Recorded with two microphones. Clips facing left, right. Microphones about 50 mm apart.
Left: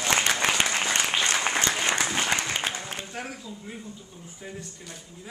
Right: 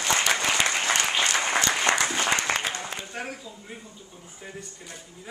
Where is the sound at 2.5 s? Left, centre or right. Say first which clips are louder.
Right 4 dB; right.